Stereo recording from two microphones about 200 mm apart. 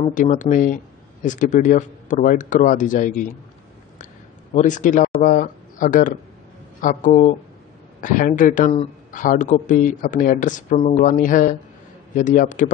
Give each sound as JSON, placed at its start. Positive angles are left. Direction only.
{"t": 0.0, "sound": "speech", "side_deg": 40}
{"t": 4.6, "sound": "speech", "side_deg": 40}